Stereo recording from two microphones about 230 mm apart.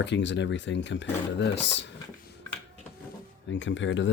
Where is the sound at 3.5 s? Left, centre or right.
Left.